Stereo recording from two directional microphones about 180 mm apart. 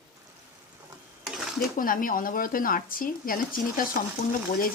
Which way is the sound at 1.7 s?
50° left (ahead or behind).